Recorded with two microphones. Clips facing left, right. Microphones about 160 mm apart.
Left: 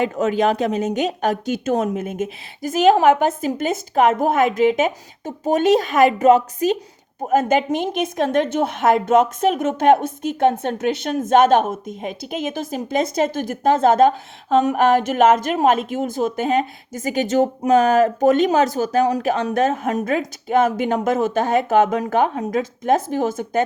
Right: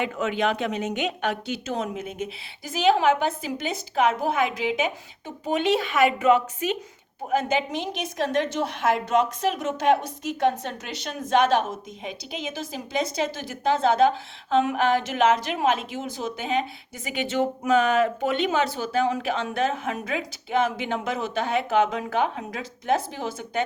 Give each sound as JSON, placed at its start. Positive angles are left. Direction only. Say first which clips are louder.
{"t": 0.0, "sound": "a woman's voice", "louder": "left 7 dB", "side_deg": 40}